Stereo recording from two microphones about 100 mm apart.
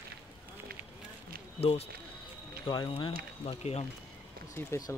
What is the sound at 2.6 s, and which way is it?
Speech, 45° left (ahead or behind).